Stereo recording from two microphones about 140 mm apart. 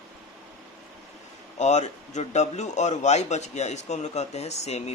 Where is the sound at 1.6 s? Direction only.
55° left (ahead or behind).